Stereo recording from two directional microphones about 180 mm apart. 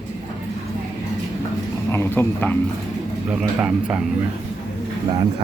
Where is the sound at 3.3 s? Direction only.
5° right (ahead or behind).